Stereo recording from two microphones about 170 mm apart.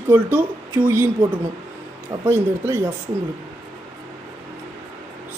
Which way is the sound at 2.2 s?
15° right (ahead or behind).